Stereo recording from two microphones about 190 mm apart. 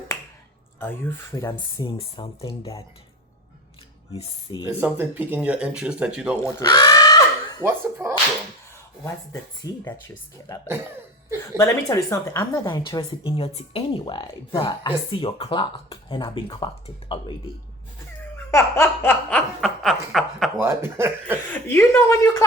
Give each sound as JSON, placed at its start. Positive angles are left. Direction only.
{"t": 0.8, "sound": "speech", "side_deg": 10}
{"t": 4.2, "sound": "speech", "side_deg": 25}
{"t": 4.6, "sound": "speech", "side_deg": -10}
{"t": 6.4, "sound": "a sound", "side_deg": 20}
{"t": 7.6, "sound": "speech", "side_deg": -10}
{"t": 9.0, "sound": "speech", "side_deg": 15}
{"t": 11.5, "sound": "speech", "side_deg": 15}
{"t": 13.2, "sound": "speech", "side_deg": 30}
{"t": 18.5, "sound": "snicker", "side_deg": 10}
{"t": 20.6, "sound": "speech", "side_deg": -15}
{"t": 21.5, "sound": "speech", "side_deg": 10}